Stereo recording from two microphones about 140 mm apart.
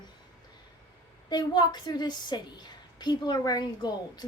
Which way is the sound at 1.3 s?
30° left (ahead or behind).